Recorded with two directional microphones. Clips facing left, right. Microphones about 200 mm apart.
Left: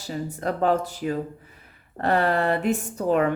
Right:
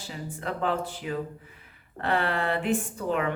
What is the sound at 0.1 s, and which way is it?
Speech, 40° left (ahead or behind).